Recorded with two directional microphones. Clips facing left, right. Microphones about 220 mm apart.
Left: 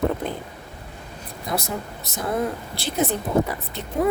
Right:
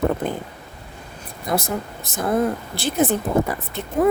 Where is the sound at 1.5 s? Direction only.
50° right (ahead or behind).